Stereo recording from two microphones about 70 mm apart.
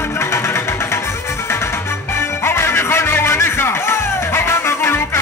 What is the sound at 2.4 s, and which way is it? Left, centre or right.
Music, left.